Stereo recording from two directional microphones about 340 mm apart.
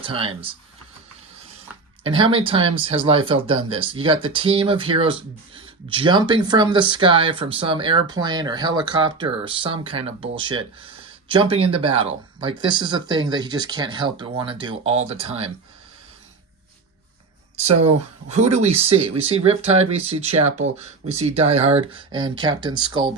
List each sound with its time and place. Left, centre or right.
0.0 s speech: centre
2.0 s speech: centre
17.6 s speech: centre